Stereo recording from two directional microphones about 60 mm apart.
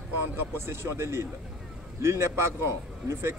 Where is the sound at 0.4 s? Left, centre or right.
Right.